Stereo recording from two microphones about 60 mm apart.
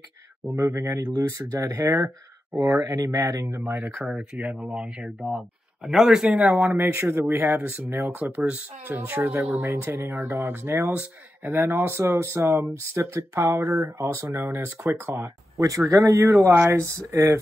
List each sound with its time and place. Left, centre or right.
0.5 s speech: right
3.6 s speech: right
3.9 s speech: centre
4.4 s speech: right
4.7 s speech: centre
6.4 s speech: right
6.7 s speech: right
7.5 s speech: right
9.2 s speech: right
10.1 s speech: right
10.9 s speech: right
11.5 s speech: right
15.9 s speech: right
16.3 s speech: right